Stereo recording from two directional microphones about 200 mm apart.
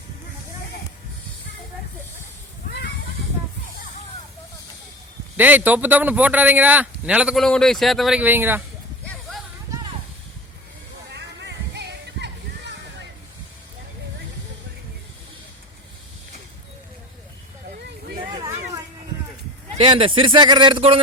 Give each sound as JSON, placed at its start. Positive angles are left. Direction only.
{"t": 5.4, "sound": "speech", "side_deg": -10}
{"t": 11.1, "sound": "music", "side_deg": -60}
{"t": 18.3, "sound": "a sound", "side_deg": -20}
{"t": 19.7, "sound": "speech", "side_deg": -30}